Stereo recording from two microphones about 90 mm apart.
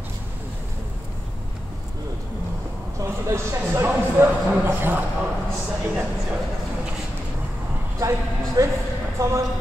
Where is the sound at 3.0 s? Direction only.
30° right (ahead or behind).